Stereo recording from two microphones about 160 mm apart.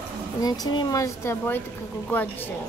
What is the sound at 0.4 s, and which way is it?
Speech, 25° left (ahead or behind).